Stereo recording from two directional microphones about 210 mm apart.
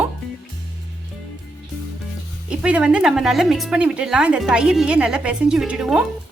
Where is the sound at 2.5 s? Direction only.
5° right (ahead or behind).